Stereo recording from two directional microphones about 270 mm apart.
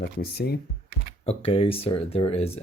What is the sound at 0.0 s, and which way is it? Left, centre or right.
Speech, left.